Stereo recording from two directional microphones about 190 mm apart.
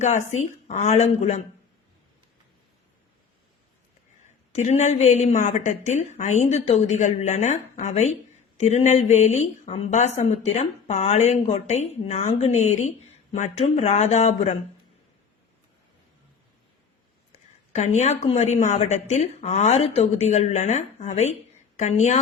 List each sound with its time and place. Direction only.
0.0 s a woman's voice: 40° left (ahead or behind)
4.5 s a woman's voice: 35° left (ahead or behind)
17.7 s a woman's voice: 35° left (ahead or behind)